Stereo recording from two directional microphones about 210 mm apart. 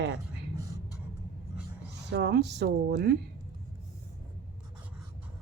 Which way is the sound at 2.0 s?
55° right (ahead or behind).